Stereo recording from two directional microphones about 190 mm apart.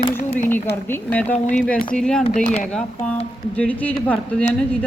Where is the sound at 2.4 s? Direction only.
40° left (ahead or behind).